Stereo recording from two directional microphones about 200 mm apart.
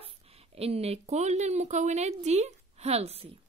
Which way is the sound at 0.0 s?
30° right (ahead or behind).